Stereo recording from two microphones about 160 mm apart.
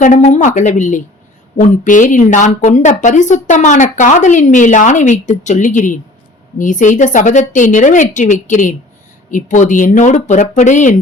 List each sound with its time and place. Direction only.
0.0 s speech: 45° left (ahead or behind)